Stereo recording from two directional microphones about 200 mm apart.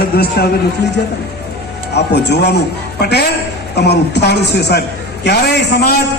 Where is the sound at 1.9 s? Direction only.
55° left (ahead or behind).